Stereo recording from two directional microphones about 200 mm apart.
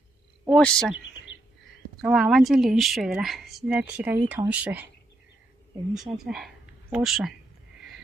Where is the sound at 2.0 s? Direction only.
Centre (ahead or behind).